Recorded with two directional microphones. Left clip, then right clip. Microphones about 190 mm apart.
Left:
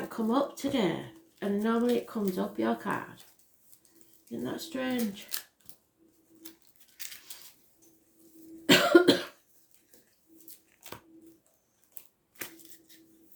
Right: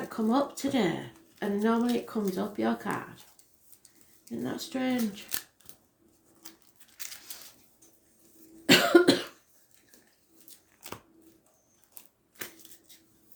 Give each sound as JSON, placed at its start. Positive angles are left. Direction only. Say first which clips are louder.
{"t": 0.1, "sound": "speech", "louder": "right 1 dB", "side_deg": -25}
{"t": 4.3, "sound": "speech", "louder": "right 1 dB", "side_deg": -20}
{"t": 6.9, "sound": "a sound", "louder": "right 1 dB", "side_deg": -5}
{"t": 8.6, "sound": "cough", "louder": "even", "side_deg": -20}